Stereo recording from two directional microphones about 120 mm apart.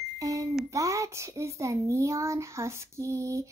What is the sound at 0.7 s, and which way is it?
A child's voice, 25° right (ahead or behind).